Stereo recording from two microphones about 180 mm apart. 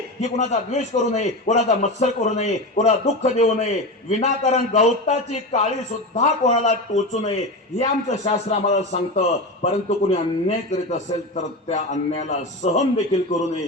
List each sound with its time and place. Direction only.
0.2 s a man's voice: 40° left (ahead or behind)